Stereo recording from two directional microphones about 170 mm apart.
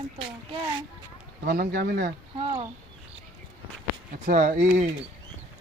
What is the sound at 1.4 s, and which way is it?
Speech, 60° right (ahead or behind).